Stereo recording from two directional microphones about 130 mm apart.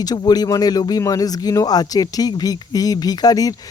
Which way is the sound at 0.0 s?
30° left (ahead or behind).